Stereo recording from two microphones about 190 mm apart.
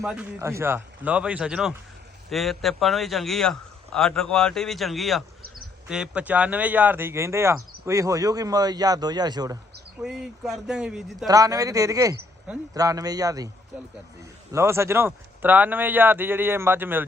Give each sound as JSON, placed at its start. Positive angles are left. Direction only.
{"t": 0.0, "sound": "a man's voice", "side_deg": -5}
{"t": 10.0, "sound": "a man's voice", "side_deg": -5}
{"t": 11.3, "sound": "speech", "side_deg": -20}